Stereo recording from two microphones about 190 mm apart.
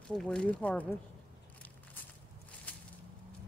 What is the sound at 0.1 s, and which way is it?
Speech, 5° left (ahead or behind).